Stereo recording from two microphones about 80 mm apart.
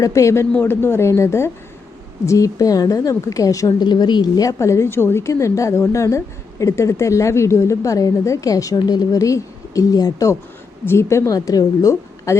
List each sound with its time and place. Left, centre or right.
0.0 s a woman's voice: left
0.5 s a woman's voice: left
3.8 s a woman's voice: left
4.4 s a woman's voice: left
10.8 s a woman's voice: left